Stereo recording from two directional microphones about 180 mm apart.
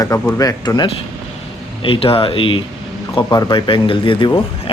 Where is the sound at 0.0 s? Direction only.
15° left (ahead or behind).